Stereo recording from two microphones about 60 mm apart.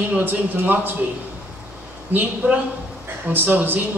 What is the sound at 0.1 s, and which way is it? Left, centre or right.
Speech, right.